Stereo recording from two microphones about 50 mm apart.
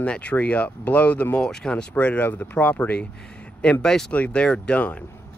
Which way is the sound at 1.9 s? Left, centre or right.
Left.